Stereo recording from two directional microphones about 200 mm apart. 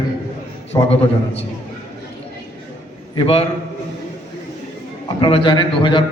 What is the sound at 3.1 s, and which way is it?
Speech, 30° left (ahead or behind).